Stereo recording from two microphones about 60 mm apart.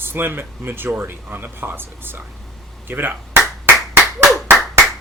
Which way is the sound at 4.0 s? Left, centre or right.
Centre.